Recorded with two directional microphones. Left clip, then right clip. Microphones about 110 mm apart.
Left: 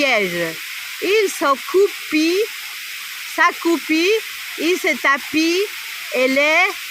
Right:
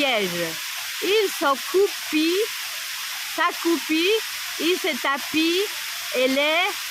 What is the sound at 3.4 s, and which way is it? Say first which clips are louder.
Speech: left 6 dB; 45° left (ahead or behind).